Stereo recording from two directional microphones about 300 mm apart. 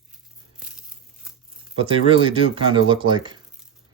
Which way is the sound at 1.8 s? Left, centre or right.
Centre.